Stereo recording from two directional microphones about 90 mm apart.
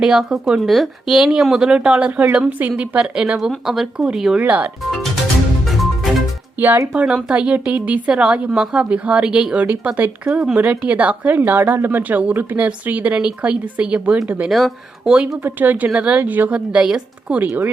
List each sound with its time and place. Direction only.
0.0 s speech: 10° right (ahead or behind)
4.4 s speech: 15° right (ahead or behind)
6.6 s speech: 20° right (ahead or behind)
15.4 s speech: 20° right (ahead or behind)